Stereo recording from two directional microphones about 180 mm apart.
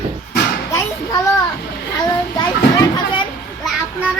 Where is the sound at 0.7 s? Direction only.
15° left (ahead or behind).